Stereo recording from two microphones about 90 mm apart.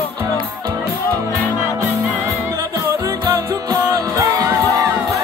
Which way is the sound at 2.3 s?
35° right (ahead or behind).